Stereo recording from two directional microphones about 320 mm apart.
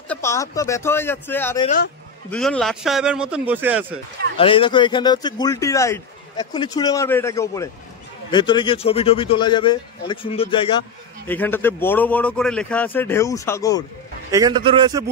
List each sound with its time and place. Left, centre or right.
0.1 s speech: centre
4.4 s speech: centre
14.3 s a man's voice: centre